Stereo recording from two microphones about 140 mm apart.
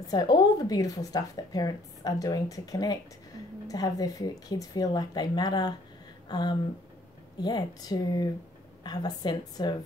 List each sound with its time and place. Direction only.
0.1 s speech: 30° left (ahead or behind)
6.2 s a sound: 30° left (ahead or behind)
7.4 s a woman's voice: 30° left (ahead or behind)